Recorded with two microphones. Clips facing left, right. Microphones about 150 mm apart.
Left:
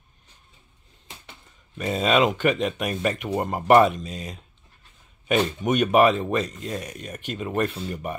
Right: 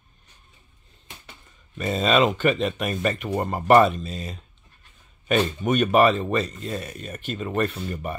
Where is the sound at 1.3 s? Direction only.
10° left (ahead or behind).